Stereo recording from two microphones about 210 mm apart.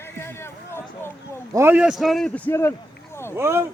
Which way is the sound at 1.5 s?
10° right (ahead or behind).